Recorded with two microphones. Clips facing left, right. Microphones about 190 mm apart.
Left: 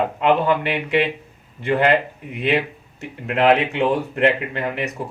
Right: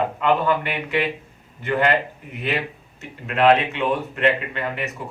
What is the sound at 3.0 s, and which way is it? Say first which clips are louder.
Speech: left 1 dB; 30° left (ahead or behind).